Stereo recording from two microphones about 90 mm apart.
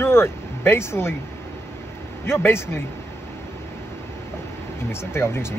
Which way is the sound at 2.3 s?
30° left (ahead or behind).